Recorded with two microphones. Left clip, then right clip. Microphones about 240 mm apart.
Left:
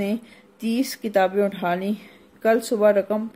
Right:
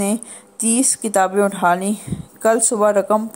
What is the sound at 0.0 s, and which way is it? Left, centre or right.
Speech, centre.